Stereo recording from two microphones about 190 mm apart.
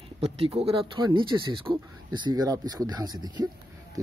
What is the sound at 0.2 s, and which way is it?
Speech, 30° right (ahead or behind).